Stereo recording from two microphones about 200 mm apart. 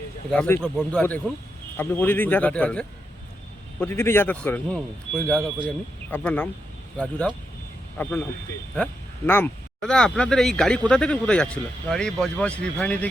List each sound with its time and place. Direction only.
0.3 s a man's voice: 10° left (ahead or behind)